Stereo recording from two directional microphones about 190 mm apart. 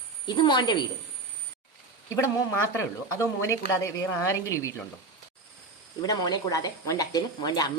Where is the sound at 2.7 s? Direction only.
15° left (ahead or behind).